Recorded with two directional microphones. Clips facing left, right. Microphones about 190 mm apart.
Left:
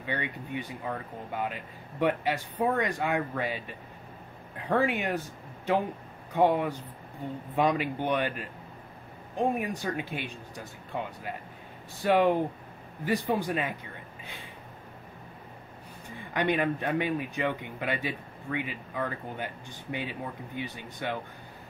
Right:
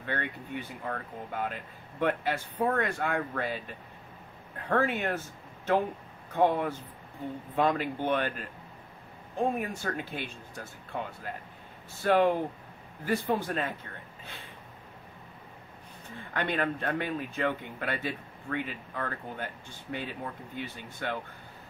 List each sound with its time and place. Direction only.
0.0 s speech: 15° left (ahead or behind)
6.3 s speech: 15° left (ahead or behind)
16.2 s speech: 15° left (ahead or behind)